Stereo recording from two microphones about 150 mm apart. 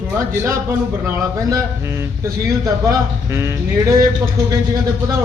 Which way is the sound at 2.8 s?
20° right (ahead or behind).